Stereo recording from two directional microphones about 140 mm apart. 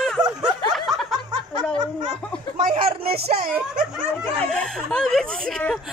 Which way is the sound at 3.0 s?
90° right.